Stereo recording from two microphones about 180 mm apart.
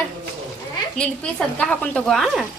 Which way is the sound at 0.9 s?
5° left (ahead or behind).